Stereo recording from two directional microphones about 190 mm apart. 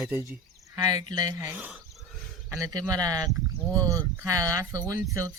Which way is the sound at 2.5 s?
20° right (ahead or behind).